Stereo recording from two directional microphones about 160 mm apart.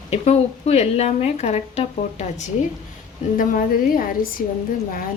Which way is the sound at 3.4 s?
60° left (ahead or behind).